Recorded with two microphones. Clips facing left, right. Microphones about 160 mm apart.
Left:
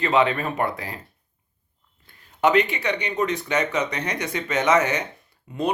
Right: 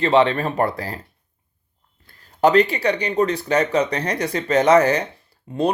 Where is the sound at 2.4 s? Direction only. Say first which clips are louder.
Right 4 dB; 35° right (ahead or behind).